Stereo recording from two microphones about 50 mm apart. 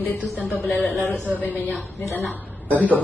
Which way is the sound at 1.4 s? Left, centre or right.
Left.